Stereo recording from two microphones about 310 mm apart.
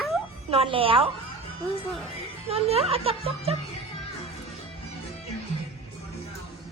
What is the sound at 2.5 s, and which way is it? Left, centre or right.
Speech, centre.